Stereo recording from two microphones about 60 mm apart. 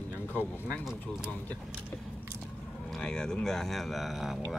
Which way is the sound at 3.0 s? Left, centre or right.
Centre.